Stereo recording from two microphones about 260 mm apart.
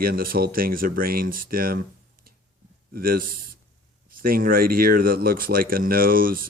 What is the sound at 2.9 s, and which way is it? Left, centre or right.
Speech, right.